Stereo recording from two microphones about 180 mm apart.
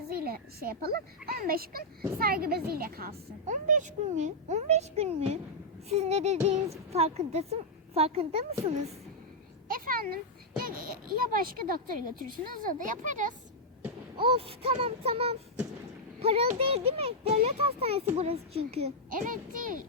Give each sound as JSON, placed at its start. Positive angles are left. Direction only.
{"t": 0.1, "sound": "a child's voice", "side_deg": -55}
{"t": 3.4, "sound": "speech", "side_deg": -45}
{"t": 9.6, "sound": "a sound", "side_deg": -50}
{"t": 10.6, "sound": "speech", "side_deg": -55}
{"t": 14.2, "sound": "speech", "side_deg": -30}
{"t": 19.1, "sound": "speech", "side_deg": -50}